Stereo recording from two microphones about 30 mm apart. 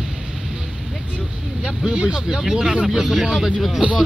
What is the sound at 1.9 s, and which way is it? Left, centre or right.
Speech, right.